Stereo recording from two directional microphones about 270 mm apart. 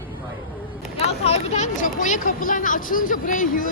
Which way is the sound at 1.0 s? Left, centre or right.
Left.